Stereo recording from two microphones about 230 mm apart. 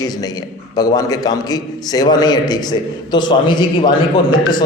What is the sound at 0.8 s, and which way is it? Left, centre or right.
A man's voice, centre.